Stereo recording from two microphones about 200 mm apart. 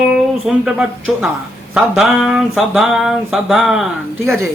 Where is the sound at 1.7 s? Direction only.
Centre (ahead or behind).